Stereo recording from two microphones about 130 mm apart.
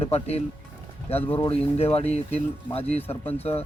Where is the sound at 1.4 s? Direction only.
50° left (ahead or behind).